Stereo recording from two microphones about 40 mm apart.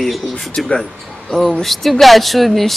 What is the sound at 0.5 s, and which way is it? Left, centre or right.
Speech, centre.